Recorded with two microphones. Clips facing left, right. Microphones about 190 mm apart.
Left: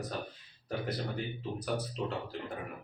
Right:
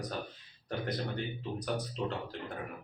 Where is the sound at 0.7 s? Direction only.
5° left (ahead or behind).